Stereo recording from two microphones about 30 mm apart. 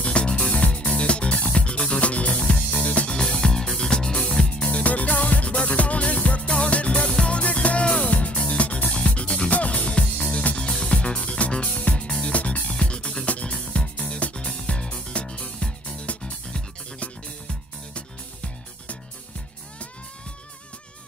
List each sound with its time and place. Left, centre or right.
0.0 s music: left
3.2 s music: left
4.6 s music: left
5.4 s music: left
12.7 s music: left
13.2 s music: left